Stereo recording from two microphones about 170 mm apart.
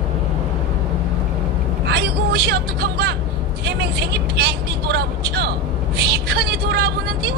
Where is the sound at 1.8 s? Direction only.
75° right (ahead or behind).